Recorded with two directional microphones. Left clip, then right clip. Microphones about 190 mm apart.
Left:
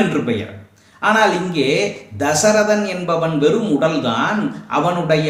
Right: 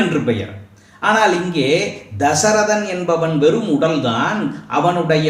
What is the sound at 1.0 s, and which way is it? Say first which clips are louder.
A man's voice: even; 10° left (ahead or behind).